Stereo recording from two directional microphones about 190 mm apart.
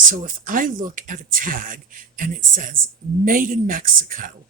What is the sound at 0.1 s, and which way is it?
Speech, 45° right (ahead or behind).